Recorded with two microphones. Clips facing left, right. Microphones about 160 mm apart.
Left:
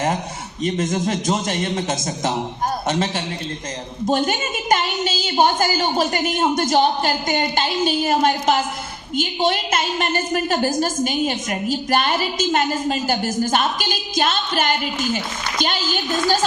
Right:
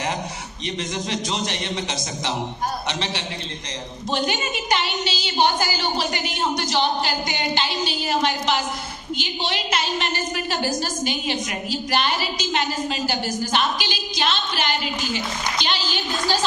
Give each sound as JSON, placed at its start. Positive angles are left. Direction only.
{"t": 0.6, "sound": "a woman's voice", "side_deg": 50}